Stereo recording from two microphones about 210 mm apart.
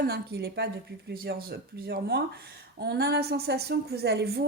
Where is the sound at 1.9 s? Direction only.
50° right (ahead or behind).